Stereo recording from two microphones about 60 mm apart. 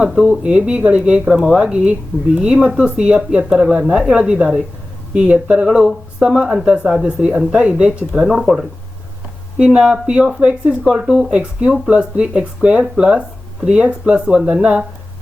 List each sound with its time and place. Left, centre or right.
0.3 s speech: centre
1.3 s speech: centre
1.5 s speech: centre
8.2 s speech: centre